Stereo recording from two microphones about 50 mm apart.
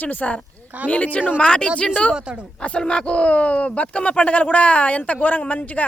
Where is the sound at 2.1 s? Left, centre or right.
Centre.